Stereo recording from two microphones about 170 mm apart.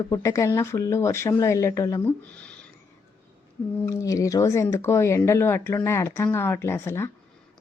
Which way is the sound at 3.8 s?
20° left (ahead or behind).